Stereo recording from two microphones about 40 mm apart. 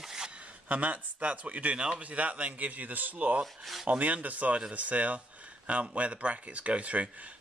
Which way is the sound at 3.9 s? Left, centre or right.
Right.